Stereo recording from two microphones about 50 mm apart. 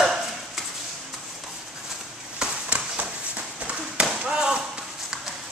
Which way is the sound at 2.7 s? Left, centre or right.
Right.